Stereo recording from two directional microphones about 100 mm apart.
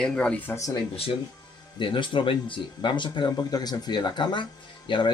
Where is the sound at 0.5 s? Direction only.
35° left (ahead or behind).